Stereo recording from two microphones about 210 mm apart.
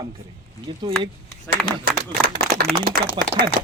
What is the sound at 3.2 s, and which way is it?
Speech, 20° right (ahead or behind).